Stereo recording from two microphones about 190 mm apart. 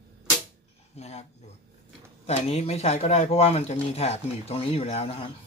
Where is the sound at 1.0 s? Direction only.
35° left (ahead or behind).